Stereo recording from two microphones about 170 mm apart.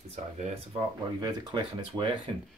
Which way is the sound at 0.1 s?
40° right (ahead or behind).